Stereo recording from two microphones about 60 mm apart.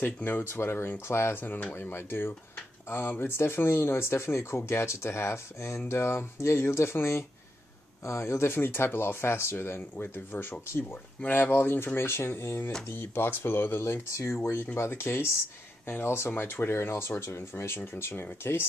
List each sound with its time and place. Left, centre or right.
0.2 s speech: left
11.1 s speech: left